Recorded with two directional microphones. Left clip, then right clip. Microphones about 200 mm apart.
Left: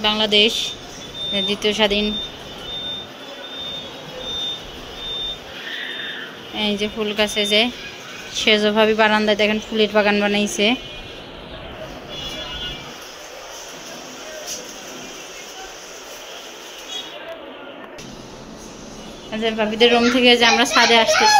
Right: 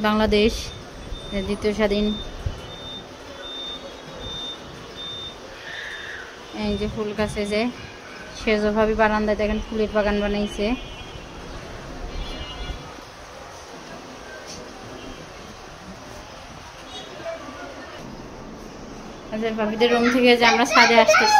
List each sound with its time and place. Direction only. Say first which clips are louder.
0.0 s speech: left 3 dB; 30° right (ahead or behind)
1.3 s a woman's voice: left 5 dB; 15° right (ahead or behind)
6.6 s a woman's voice: left 5 dB; 10° right (ahead or behind)
19.3 s a woman's voice: left 4 dB; centre (ahead or behind)